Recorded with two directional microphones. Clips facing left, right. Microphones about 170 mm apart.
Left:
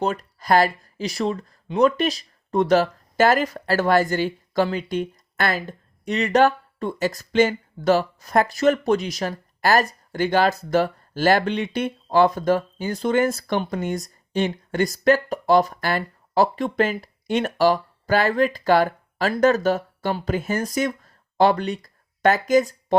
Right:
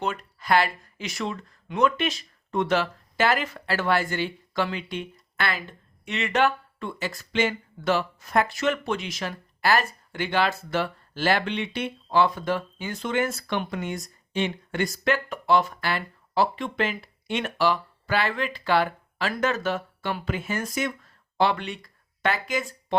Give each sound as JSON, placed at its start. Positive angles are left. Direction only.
{"t": 0.0, "sound": "speech", "side_deg": 40}